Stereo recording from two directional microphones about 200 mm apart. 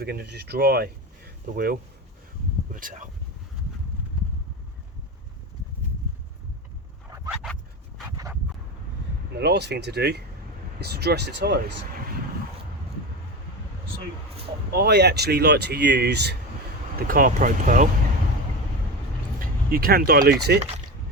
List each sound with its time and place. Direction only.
0.0 s speech: 55° right (ahead or behind)
7.3 s dog: centre (ahead or behind)
8.1 s a sound: 15° right (ahead or behind)
9.4 s speech: 55° right (ahead or behind)
14.7 s speech: 55° right (ahead or behind)
17.1 s speech: 45° right (ahead or behind)
19.4 s speech: 45° right (ahead or behind)